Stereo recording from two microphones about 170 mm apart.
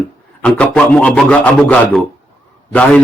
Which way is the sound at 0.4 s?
5° left (ahead or behind).